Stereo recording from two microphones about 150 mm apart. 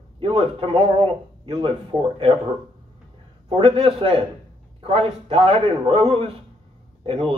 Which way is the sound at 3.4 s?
35° right (ahead or behind).